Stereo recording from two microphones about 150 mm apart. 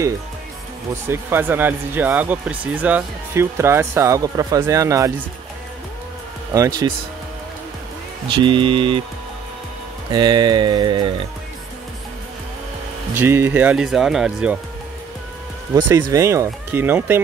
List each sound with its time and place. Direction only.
1.0 s speech: 15° right (ahead or behind)
6.5 s speech: 20° right (ahead or behind)
8.3 s speech: 35° right (ahead or behind)
10.1 s speech: 30° right (ahead or behind)
13.1 s speech: 15° right (ahead or behind)
15.7 s speech: 20° right (ahead or behind)